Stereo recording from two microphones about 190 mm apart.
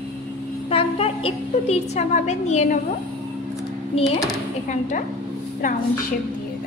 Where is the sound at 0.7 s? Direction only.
30° left (ahead or behind).